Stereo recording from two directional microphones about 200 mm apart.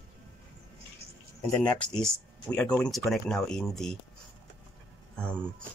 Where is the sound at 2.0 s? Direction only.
5° left (ahead or behind).